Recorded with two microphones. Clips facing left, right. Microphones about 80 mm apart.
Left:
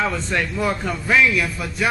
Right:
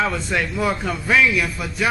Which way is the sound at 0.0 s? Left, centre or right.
Centre.